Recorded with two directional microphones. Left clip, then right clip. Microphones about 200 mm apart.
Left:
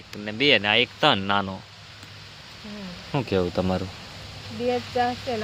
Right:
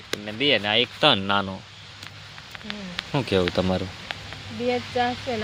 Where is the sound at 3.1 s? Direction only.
10° right (ahead or behind).